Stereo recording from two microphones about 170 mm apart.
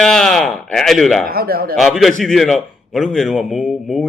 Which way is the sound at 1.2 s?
60° right (ahead or behind).